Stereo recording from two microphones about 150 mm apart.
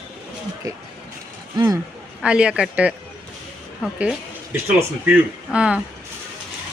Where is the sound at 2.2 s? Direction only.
5° right (ahead or behind).